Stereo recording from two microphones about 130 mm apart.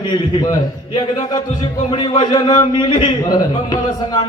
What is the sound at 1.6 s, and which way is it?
A man's voice, 35° left (ahead or behind).